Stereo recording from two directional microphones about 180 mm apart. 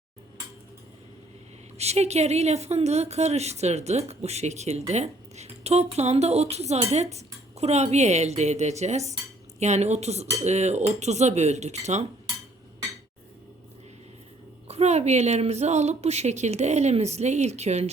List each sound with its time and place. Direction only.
1.8 s speech: 35° right (ahead or behind)
14.7 s speech: 35° right (ahead or behind)